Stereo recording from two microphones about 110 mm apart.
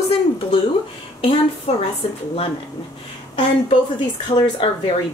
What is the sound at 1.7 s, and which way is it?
Speech, 75° left (ahead or behind).